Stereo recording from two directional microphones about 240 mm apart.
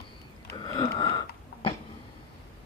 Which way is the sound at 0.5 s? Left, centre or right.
Centre.